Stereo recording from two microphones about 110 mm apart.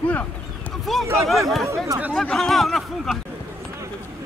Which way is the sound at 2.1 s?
5° left (ahead or behind).